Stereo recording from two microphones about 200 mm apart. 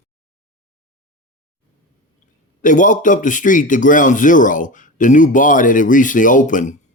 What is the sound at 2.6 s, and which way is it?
Speech, 40° left (ahead or behind).